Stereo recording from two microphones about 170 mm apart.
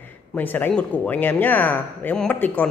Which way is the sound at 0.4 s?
10° left (ahead or behind).